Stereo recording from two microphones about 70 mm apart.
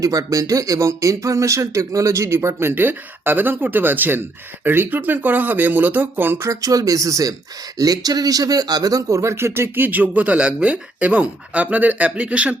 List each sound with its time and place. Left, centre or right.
0.0 s speech: right
6.5 s speech: right
7.8 s speech: right; by 12.5 s centre